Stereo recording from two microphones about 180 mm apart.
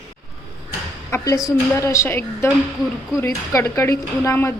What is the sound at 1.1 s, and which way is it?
A woman's voice, 15° left (ahead or behind).